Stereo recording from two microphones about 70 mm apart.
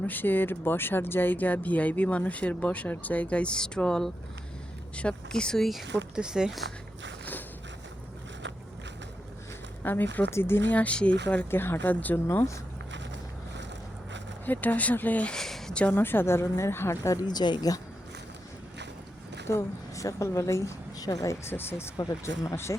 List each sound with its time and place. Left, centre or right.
0.0 s speech: left; by 5.6 s centre
5.6 s speech: centre
9.8 s speech: left
10.7 s speech: centre
11.5 s speech: left
12.3 s a woman's voice: left
14.4 s speech: left
15.4 s a sound: centre
15.8 s a woman's voice: left
17.2 s speech: left
19.5 s a woman's voice: left
21.4 s a woman's voice: left